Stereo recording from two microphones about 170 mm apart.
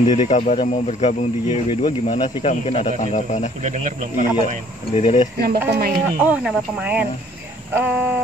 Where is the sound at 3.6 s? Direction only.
45° right (ahead or behind).